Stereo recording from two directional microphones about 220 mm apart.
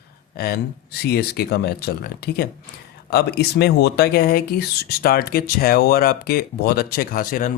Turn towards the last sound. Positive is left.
turn(degrees=40)  # may be behind; listen again after turning